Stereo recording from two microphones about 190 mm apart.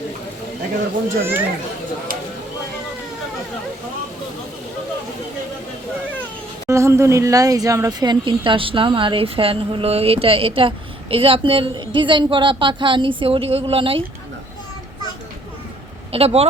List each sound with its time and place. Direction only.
1.2 s a child's voice: 10° right (ahead or behind)
6.7 s speech: 15° right (ahead or behind)
16.1 s speech: 30° right (ahead or behind)